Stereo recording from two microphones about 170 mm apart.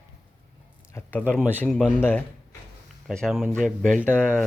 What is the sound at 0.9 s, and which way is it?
Speech, 10° left (ahead or behind).